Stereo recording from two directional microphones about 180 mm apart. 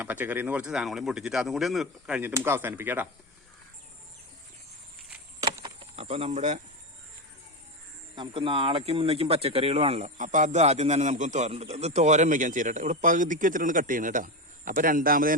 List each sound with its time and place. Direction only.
0.0 s speech: 10° right (ahead or behind)
5.4 s a sound: 20° right (ahead or behind)
6.0 s speech: 35° right (ahead or behind)
8.1 s speech: 30° right (ahead or behind); by 15.4 s 50° right (ahead or behind)